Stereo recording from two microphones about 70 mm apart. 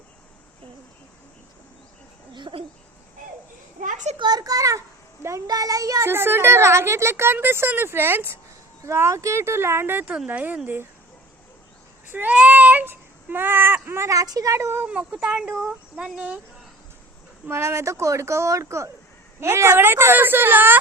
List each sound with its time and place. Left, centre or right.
4.2 s a sound: right
5.5 s speech: right
6.1 s a woman's voice: right
12.1 s speech: right
14.1 s speech: right
14.8 s speech: centre
17.5 s a woman's voice: right